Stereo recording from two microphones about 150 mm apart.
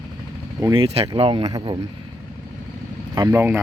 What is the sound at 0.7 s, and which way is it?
Speech, 40° right (ahead or behind).